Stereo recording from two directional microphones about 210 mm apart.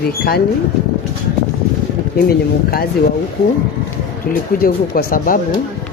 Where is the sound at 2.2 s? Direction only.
45° left (ahead or behind).